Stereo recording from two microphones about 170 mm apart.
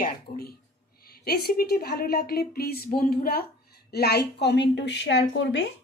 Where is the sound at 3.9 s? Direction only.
70° left (ahead or behind); by 5.7 s 90° left.